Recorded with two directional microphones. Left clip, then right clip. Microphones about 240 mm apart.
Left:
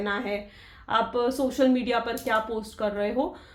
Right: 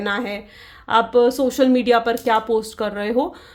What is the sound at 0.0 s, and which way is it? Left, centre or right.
Speech, right.